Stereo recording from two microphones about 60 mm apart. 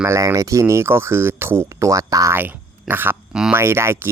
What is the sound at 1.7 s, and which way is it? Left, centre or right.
Speech, right.